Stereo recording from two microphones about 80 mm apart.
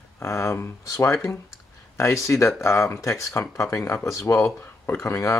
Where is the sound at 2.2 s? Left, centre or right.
Left.